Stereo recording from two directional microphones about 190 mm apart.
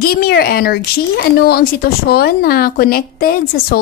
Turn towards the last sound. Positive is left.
turn(degrees=55)  # may be behind; listen again after turning